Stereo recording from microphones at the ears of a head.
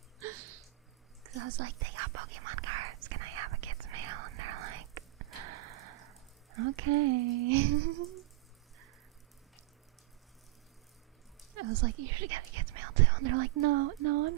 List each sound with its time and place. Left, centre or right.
0.2 s a sound: right
1.2 s whispering: right
11.5 s speech: right